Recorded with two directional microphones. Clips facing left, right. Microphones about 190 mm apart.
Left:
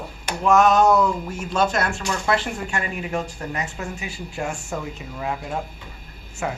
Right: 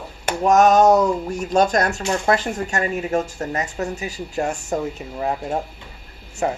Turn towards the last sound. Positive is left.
turn(degrees=-35)  # may be behind; listen again after turning